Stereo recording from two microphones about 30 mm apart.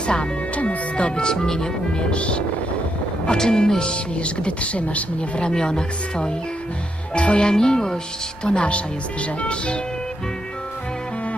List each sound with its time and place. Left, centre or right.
0.0 s speech: left
0.5 s music: left
0.9 s speech: left
3.2 s speech: left
5.4 s speech: left
7.1 s speech: left
7.5 s speech: left
8.5 s speech: left